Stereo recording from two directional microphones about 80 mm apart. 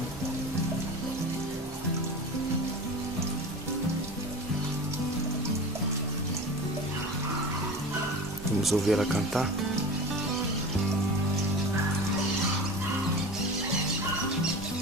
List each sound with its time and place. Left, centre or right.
8.6 s speech: centre